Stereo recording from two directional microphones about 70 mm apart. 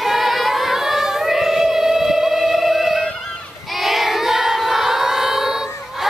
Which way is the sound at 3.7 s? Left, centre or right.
Centre.